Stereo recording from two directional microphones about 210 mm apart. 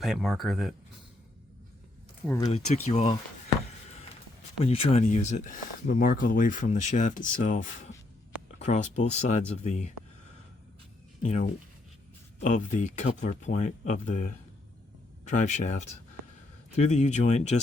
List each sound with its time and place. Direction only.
0.0 s speech: centre (ahead or behind)
2.5 s speech: 30° left (ahead or behind)
4.6 s speech: 30° left (ahead or behind)
11.2 s speech: 35° left (ahead or behind)